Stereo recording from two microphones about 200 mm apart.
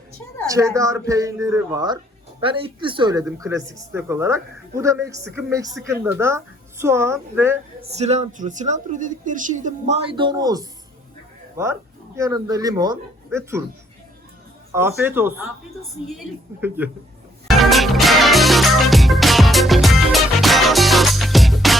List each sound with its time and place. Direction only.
0.4 s speech: 15° right (ahead or behind)
7.9 s a woman's voice: 35° right (ahead or behind); by 13.7 s 15° right (ahead or behind)
14.7 s speech: 10° right (ahead or behind)
17.5 s music: centre (ahead or behind)